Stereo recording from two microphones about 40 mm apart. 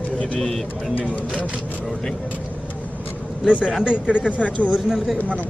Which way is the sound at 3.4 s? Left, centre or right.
Right.